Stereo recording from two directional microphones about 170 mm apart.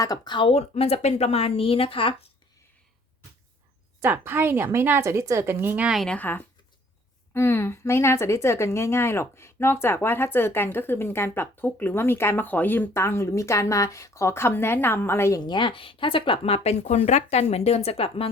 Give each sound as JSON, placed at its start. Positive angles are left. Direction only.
{"t": 0.0, "sound": "speech", "side_deg": 25}
{"t": 4.0, "sound": "a woman's voice", "side_deg": -10}
{"t": 15.4, "sound": "speech", "side_deg": 30}